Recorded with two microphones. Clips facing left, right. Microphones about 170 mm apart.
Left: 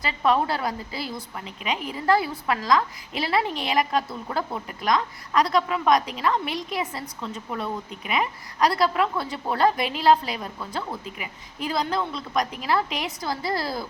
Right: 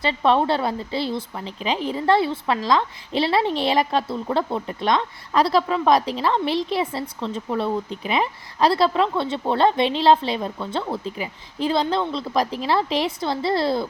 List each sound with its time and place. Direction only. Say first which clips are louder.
0.0 s a woman's voice: right 3 dB; 30° right (ahead or behind)